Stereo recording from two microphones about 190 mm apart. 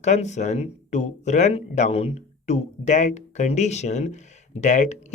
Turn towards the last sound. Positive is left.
turn(degrees=40)  # may be behind; listen again after turning